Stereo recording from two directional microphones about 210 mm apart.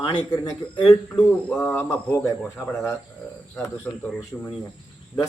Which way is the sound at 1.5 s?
10° left (ahead or behind).